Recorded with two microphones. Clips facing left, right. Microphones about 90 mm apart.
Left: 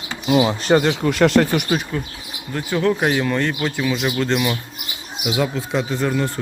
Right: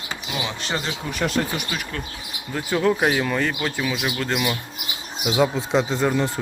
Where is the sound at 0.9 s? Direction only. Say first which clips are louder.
Left 10 dB; 85° left.